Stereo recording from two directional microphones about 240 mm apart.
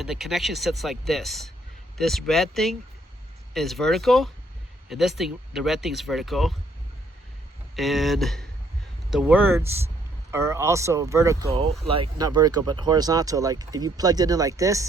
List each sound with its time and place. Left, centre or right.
0.0 s speech: centre
7.8 s speech: centre